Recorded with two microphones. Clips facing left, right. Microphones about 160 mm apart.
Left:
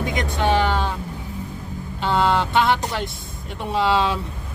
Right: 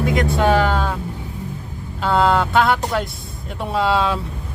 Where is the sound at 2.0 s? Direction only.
Centre (ahead or behind).